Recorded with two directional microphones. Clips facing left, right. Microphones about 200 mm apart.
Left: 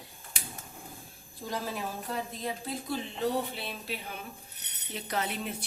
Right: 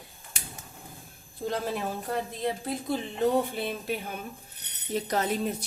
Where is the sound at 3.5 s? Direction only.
50° right (ahead or behind).